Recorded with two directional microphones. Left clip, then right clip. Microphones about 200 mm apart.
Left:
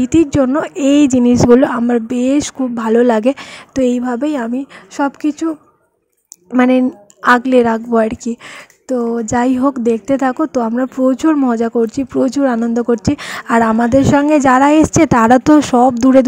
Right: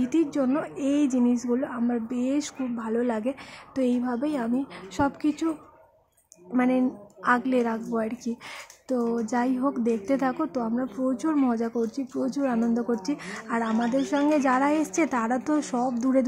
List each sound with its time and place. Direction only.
0.0 s a woman's voice: 40° left (ahead or behind)
6.5 s a woman's voice: 40° left (ahead or behind)